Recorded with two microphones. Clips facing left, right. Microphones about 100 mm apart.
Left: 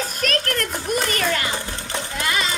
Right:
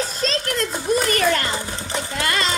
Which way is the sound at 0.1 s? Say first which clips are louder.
Even; 25° right (ahead or behind).